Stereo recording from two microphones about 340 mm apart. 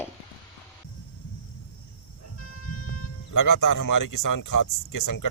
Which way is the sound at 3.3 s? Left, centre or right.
Left.